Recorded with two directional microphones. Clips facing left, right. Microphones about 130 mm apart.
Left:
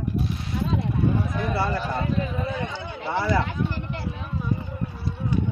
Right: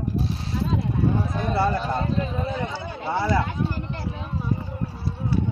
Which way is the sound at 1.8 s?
25° right (ahead or behind).